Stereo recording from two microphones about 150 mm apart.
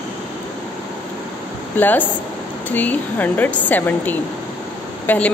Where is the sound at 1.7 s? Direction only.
10° left (ahead or behind).